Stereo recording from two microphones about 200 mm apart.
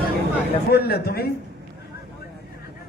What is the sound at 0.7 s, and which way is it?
Speech, 50° left (ahead or behind).